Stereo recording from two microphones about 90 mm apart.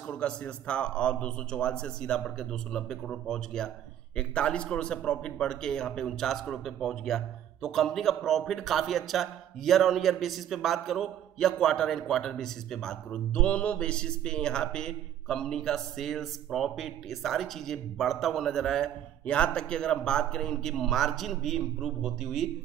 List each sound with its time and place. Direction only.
0.0 s a man's voice: 10° left (ahead or behind)